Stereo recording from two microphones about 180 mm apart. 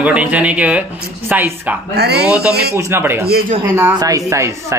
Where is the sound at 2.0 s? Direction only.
65° right (ahead or behind).